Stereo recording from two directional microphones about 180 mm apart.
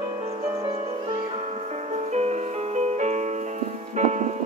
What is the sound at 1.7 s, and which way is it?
Music, 40° right (ahead or behind).